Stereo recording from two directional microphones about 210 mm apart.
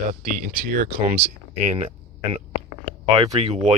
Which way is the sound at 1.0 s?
30° right (ahead or behind).